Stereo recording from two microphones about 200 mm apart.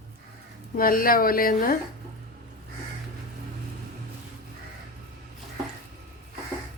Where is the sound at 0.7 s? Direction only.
45° left (ahead or behind).